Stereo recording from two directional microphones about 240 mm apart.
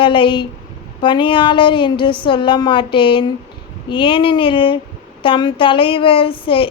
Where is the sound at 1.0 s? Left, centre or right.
Centre.